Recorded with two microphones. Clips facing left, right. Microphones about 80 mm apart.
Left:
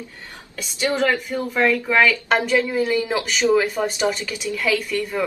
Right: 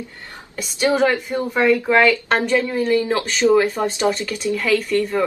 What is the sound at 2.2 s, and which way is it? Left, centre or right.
Speech, centre.